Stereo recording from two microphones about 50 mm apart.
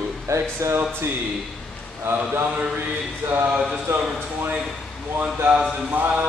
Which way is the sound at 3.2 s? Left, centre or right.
Right.